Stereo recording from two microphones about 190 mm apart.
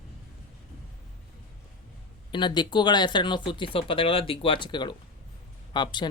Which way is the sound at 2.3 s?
25° left (ahead or behind).